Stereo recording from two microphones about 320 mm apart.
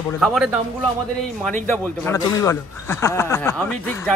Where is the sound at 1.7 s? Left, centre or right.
Centre.